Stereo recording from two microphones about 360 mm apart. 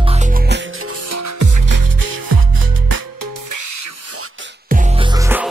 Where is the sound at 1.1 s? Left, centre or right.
Right.